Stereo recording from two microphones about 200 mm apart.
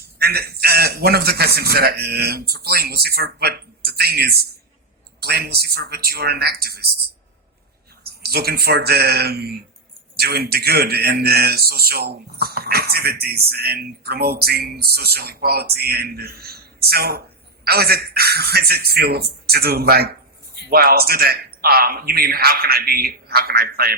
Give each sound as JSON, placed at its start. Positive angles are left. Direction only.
{"t": 0.2, "sound": "a man's voice", "side_deg": -50}
{"t": 8.0, "sound": "a man's voice", "side_deg": -50}